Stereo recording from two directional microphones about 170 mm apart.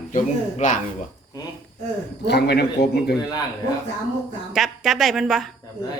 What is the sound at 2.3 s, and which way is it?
Speech, 75° left (ahead or behind).